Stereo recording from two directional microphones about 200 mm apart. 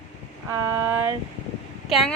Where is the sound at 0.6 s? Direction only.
10° right (ahead or behind).